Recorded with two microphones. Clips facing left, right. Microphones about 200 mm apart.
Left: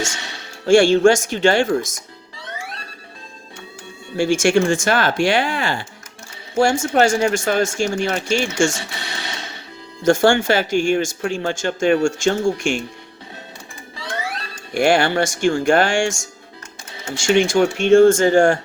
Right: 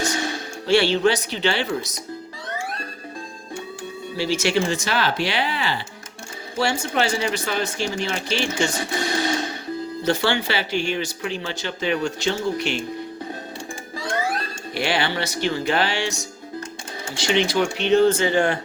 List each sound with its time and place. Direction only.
0.6 s speech: 45° left (ahead or behind)
4.2 s speech: 50° left (ahead or behind)
8.9 s a sound: 45° right (ahead or behind)
10.0 s speech: 45° left (ahead or behind)
14.7 s speech: 50° left (ahead or behind)